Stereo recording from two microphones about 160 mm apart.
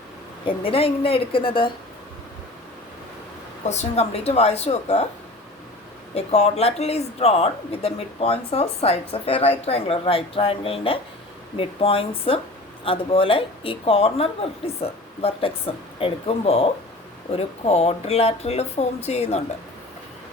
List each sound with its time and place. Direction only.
0.4 s speech: 35° left (ahead or behind)
3.7 s speech: 45° left (ahead or behind)
6.1 s speech: 40° left (ahead or behind)